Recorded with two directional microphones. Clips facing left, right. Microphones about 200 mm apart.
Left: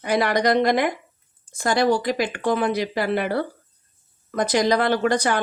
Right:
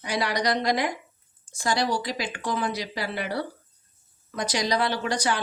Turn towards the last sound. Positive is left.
turn(degrees=55)  # may be behind; listen again after turning